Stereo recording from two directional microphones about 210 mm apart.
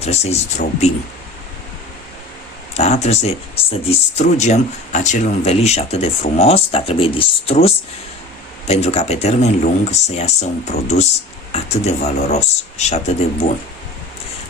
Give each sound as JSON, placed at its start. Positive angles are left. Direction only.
{"t": 0.0, "sound": "speech", "side_deg": 30}
{"t": 2.7, "sound": "speech", "side_deg": 30}